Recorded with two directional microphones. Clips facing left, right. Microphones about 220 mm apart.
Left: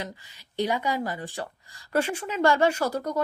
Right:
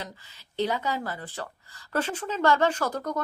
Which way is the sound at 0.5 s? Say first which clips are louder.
Left 1 dB; 15° left (ahead or behind).